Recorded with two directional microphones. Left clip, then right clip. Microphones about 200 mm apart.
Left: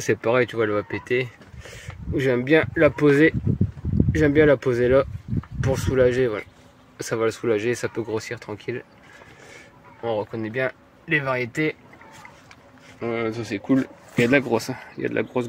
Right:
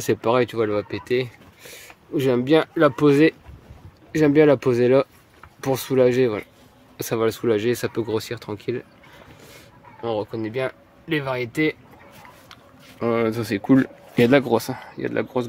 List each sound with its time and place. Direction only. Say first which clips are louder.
0.0 s speech: right 1 dB; 15° right (ahead or behind)
10.0 s speech: even; 15° right (ahead or behind)
13.0 s speech: right 4 dB; 40° right (ahead or behind)
14.1 s speech: right 2 dB; 25° right (ahead or behind)
14.7 s speech: even; 5° right (ahead or behind)